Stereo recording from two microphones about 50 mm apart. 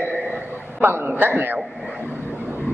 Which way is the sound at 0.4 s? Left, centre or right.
Right.